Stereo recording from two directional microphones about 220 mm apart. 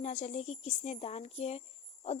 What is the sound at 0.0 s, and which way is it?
Speech, 30° left (ahead or behind).